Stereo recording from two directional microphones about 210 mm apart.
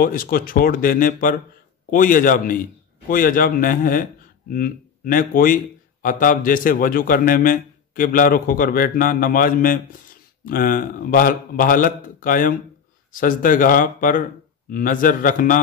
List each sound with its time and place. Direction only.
0.0 s a man's voice: 45° left (ahead or behind)